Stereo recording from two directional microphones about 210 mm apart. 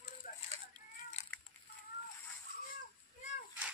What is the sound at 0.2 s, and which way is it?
Chicken, 40° left (ahead or behind).